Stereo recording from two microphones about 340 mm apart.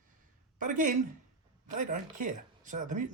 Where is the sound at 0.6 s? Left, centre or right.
Right.